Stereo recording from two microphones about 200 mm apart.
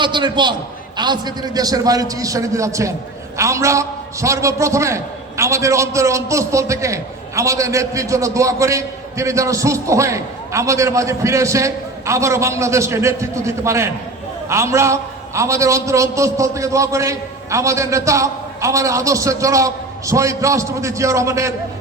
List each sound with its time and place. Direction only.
0.0 s a man's voice: 25° right (ahead or behind)